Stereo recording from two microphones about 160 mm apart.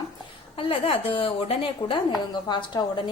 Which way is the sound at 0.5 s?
35° left (ahead or behind).